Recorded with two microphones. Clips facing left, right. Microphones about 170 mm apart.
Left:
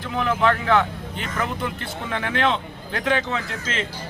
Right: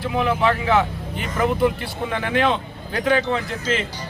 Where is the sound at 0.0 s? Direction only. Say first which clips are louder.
Right 1 dB; 10° right (ahead or behind).